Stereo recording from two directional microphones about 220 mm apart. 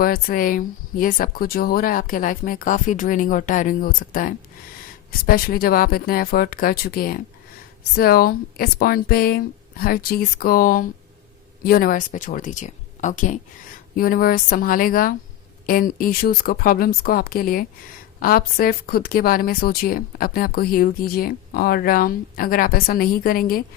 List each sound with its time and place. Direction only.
0.0 s a woman's voice: 40° left (ahead or behind)